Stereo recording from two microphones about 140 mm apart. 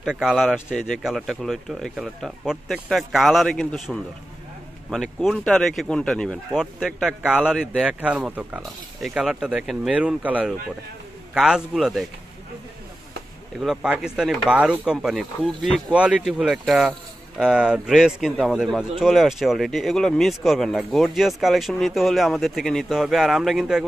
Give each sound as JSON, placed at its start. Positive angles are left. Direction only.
{"t": 0.0, "sound": "a man's voice", "side_deg": -5}
{"t": 13.6, "sound": "a man's voice", "side_deg": -5}